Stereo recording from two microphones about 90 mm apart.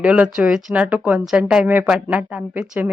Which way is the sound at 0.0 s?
15° right (ahead or behind).